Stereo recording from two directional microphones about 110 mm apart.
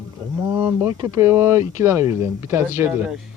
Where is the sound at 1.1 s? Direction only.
25° right (ahead or behind).